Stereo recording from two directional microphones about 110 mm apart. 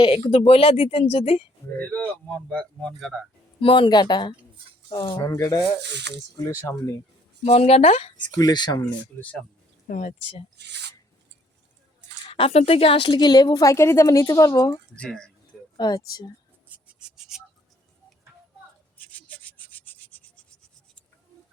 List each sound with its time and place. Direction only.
0.0 s speech: 60° left (ahead or behind)
1.8 s speech: 15° left (ahead or behind)
3.6 s a woman's voice: 50° left (ahead or behind)
5.2 s a woman's voice: 25° left (ahead or behind)
7.4 s speech: 75° left (ahead or behind)
8.1 s a woman's voice: 40° left (ahead or behind)
9.1 s speech: 20° left (ahead or behind)
12.3 s a woman's voice: 65° left (ahead or behind); by 14.8 s 25° left (ahead or behind)
14.9 s speech: 5° left (ahead or behind)
15.8 s a woman's voice: 35° left (ahead or behind)
16.6 s a sound: 10° right (ahead or behind)
18.9 s rub: 15° left (ahead or behind)